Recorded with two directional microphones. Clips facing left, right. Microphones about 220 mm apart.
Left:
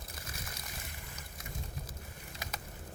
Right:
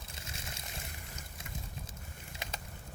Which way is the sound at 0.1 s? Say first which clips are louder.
Right 1 dB; 25° right (ahead or behind).